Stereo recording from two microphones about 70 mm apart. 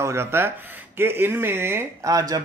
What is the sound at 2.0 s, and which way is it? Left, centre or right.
Speech, right.